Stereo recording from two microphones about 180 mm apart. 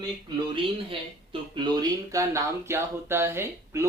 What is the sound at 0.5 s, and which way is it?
Speech, 30° right (ahead or behind).